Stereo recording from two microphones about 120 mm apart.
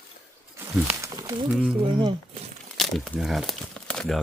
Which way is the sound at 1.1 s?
35° right (ahead or behind).